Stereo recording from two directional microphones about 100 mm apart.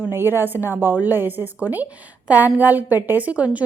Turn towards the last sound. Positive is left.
turn(degrees=-15)  # may be behind; listen again after turning